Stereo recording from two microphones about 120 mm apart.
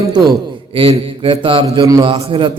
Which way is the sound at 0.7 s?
55° right (ahead or behind).